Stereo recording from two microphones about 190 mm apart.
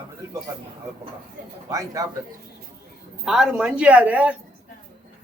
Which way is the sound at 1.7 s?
15° right (ahead or behind).